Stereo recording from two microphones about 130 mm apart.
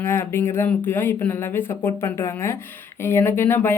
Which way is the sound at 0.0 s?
20° left (ahead or behind).